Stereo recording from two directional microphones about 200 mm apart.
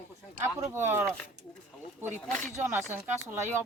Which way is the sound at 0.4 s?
10° right (ahead or behind).